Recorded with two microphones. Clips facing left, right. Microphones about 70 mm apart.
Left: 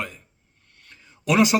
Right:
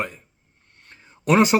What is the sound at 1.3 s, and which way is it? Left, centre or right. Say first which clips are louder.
Speech: right 2 dB; right.